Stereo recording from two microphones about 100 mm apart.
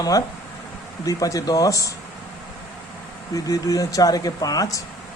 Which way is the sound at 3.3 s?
35° left (ahead or behind).